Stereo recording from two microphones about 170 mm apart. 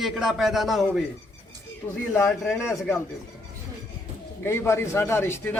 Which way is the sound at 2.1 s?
10° left (ahead or behind).